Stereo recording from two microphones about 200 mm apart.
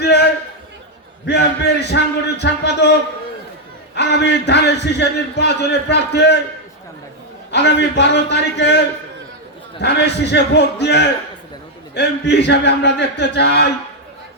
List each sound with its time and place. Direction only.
0.0 s a sound: 55° left (ahead or behind)
1.3 s speech: 55° left (ahead or behind)
7.5 s speech: 60° left (ahead or behind)